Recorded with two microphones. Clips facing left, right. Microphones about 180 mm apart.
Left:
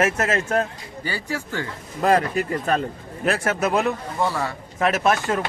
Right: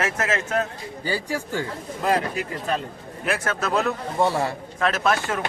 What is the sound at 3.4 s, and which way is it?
Speech, 20° left (ahead or behind).